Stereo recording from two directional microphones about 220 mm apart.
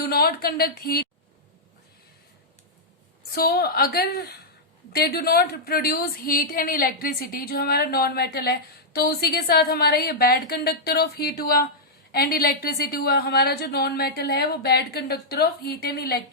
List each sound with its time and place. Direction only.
0.1 s a woman's voice: 45° left (ahead or behind)
3.3 s a woman's voice: 45° left (ahead or behind)